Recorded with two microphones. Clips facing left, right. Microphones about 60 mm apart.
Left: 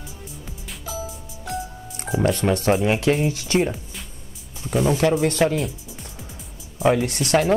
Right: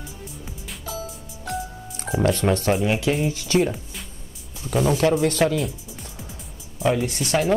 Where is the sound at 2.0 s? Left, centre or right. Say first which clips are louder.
Even; centre.